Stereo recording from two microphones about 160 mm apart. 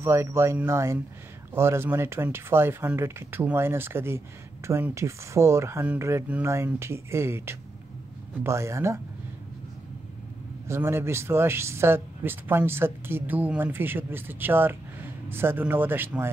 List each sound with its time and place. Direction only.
0.0 s speech: 15° right (ahead or behind)
10.7 s speech: 15° right (ahead or behind)